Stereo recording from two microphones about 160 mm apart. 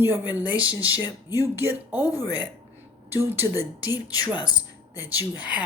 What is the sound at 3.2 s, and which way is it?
Speech, 15° right (ahead or behind).